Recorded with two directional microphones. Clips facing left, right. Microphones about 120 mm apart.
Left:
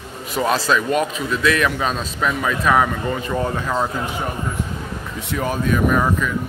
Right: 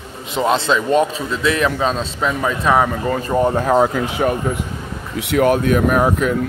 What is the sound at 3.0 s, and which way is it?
Speech, 45° right (ahead or behind).